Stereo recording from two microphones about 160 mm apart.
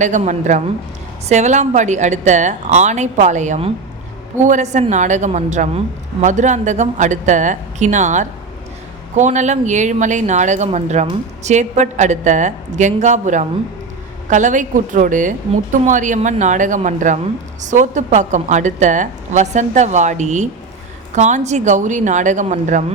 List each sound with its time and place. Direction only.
0.0 s a woman's voice: 50° right (ahead or behind)